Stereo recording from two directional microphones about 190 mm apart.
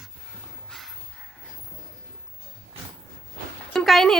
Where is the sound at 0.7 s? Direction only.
Centre (ahead or behind).